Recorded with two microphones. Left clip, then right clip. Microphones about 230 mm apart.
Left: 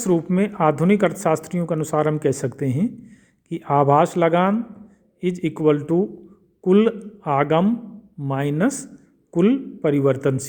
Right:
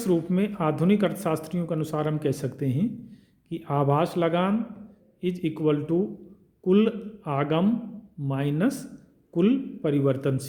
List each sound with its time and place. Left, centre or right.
0.0 s speech: left